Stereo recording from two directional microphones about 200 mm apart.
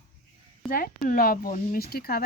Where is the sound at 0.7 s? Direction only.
45° left (ahead or behind).